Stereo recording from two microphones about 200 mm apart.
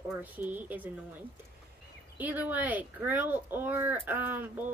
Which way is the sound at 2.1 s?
10° right (ahead or behind).